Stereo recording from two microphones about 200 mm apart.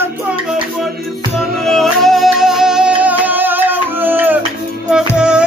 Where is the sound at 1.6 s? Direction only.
Centre (ahead or behind).